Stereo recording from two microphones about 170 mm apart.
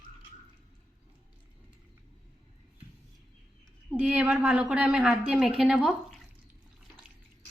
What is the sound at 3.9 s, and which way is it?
A woman's voice, 5° right (ahead or behind).